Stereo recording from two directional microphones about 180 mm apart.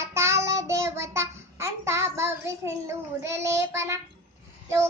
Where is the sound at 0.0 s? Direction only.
15° right (ahead or behind).